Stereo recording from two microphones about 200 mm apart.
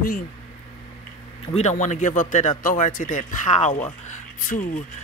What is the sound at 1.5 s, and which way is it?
Speech, 35° left (ahead or behind).